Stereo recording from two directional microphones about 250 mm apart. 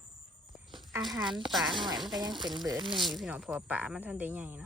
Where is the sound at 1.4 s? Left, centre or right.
Centre.